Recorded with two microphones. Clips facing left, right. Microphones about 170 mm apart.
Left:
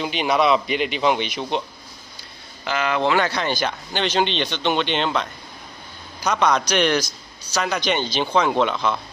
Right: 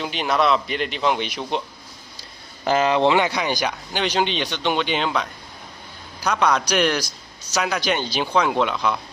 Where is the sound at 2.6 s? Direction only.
35° right (ahead or behind); by 5.2 s 5° right (ahead or behind).